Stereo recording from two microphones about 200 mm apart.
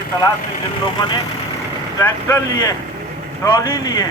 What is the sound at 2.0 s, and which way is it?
A man's voice, 10° left (ahead or behind).